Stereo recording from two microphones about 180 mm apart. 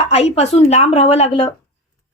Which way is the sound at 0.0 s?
35° left (ahead or behind).